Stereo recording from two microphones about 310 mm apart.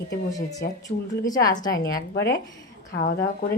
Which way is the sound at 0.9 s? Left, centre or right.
Left.